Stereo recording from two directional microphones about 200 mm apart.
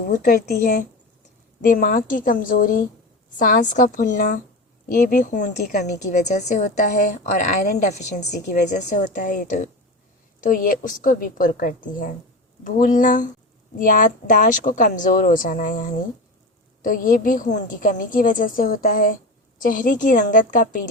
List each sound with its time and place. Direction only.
0.1 s a woman's voice: 50° left (ahead or behind)